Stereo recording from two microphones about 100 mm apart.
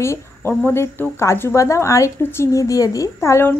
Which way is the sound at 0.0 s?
25° left (ahead or behind).